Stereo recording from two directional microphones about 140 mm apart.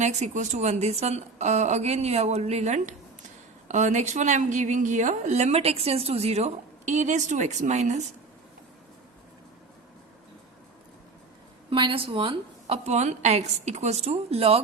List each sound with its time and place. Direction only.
0.0 s a woman's voice: 55° right (ahead or behind)
11.7 s a woman's voice: 35° right (ahead or behind)